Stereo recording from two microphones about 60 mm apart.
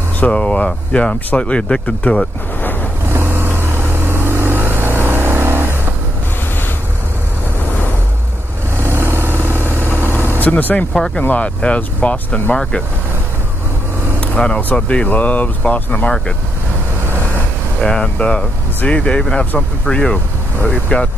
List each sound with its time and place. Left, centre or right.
0.2 s speech: centre
3.1 s vehicle: right
8.8 s vehicle: right
10.4 s speech: left
14.2 s vehicle: centre
14.6 s speech: left
17.7 s speech: centre